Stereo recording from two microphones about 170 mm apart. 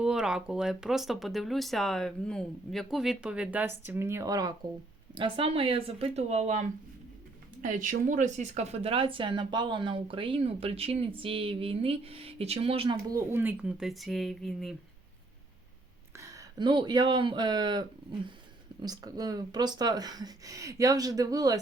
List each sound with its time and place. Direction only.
0.0 s a woman's voice: 5° right (ahead or behind); by 13.0 s 35° right (ahead or behind)
13.1 s speech: 15° right (ahead or behind); by 14.8 s centre (ahead or behind)
16.1 s speech: 20° right (ahead or behind)